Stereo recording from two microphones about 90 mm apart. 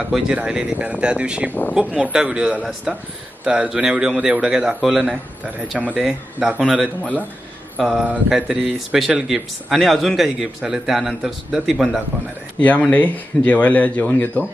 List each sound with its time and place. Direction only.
0.1 s a man's voice: 10° right (ahead or behind)
12.5 s speech: 15° left (ahead or behind)